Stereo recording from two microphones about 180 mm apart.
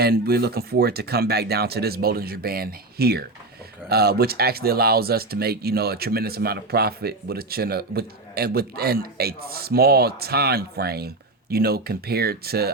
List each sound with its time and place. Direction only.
0.0 s speech: 60° right (ahead or behind)